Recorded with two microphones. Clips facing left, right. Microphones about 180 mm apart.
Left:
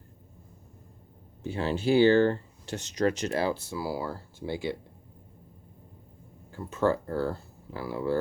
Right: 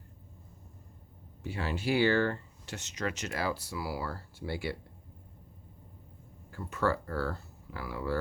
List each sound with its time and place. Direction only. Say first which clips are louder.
1.5 s speech: left 6 dB; 30° left (ahead or behind)
6.5 s speech: left 5 dB; 25° left (ahead or behind)